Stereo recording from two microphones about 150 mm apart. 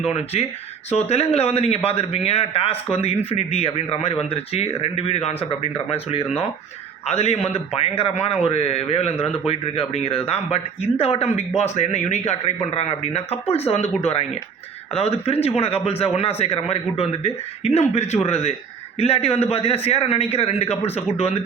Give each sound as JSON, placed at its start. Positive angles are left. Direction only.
{"t": 0.1, "sound": "a man's voice", "side_deg": 45}